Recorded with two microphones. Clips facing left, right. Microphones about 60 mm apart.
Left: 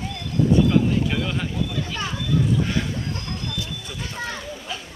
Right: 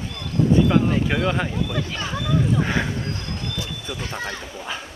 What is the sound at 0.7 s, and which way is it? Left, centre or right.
Speech, right.